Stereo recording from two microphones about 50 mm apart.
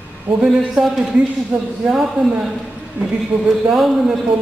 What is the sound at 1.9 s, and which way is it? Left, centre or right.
A man's voice, centre.